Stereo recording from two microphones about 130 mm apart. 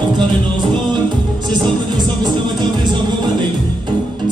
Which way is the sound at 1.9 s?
35° right (ahead or behind).